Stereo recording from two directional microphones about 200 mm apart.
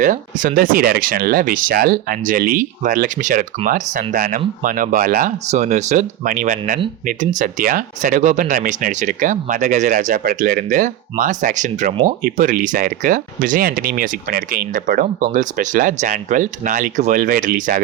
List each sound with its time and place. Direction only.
0.0 s speech: 40° right (ahead or behind)